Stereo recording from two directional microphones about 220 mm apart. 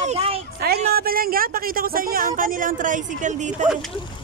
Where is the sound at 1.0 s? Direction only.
40° right (ahead or behind).